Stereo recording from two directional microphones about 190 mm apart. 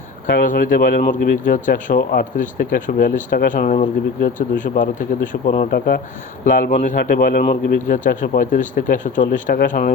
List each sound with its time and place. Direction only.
0.4 s speech: 45° left (ahead or behind)